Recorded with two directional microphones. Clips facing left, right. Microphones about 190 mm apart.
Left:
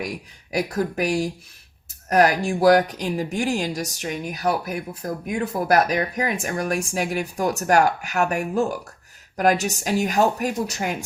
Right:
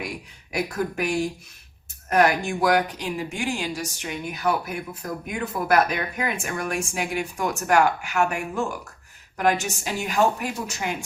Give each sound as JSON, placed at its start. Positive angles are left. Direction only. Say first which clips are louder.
{"t": 0.5, "sound": "speech", "louder": "left 3 dB", "side_deg": 35}